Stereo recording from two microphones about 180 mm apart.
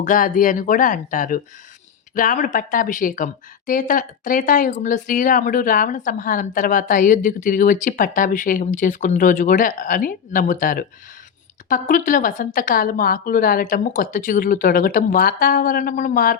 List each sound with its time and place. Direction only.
0.0 s speech: 50° left (ahead or behind)